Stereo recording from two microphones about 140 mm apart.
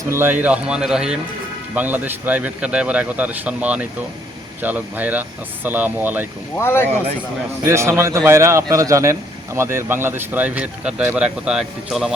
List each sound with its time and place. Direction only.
0.1 s speech: 15° right (ahead or behind)
6.6 s speech: 15° left (ahead or behind)
7.6 s a man's voice: 20° right (ahead or behind); by 12.1 s 5° right (ahead or behind)